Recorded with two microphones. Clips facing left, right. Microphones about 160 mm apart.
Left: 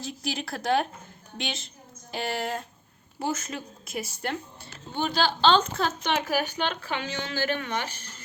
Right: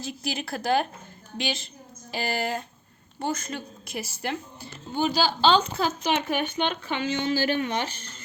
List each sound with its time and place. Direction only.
0.0 s a woman's voice: centre (ahead or behind)
7.3 s speech: 20° right (ahead or behind)